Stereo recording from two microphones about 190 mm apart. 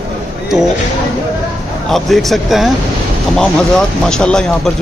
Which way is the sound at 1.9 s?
Centre (ahead or behind).